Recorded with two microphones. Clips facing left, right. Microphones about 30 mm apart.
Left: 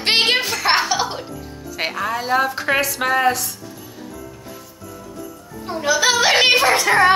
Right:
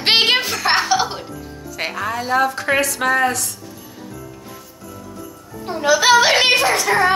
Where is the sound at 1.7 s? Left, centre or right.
Centre.